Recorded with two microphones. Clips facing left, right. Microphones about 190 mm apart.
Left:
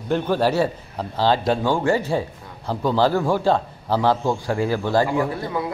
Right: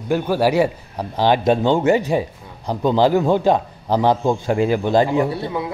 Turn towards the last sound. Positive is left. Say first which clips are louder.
# right 3 dB
turn(degrees=-25)  # may be behind; listen again after turning